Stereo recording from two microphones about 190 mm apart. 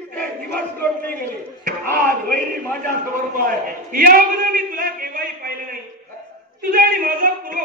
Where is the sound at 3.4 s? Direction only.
50° right (ahead or behind).